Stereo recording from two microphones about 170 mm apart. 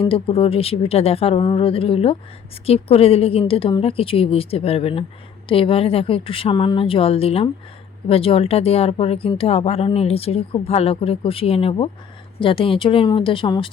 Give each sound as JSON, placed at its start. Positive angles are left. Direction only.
{"t": 0.0, "sound": "speech", "side_deg": 35}